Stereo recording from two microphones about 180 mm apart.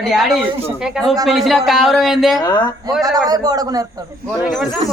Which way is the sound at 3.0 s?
20° right (ahead or behind).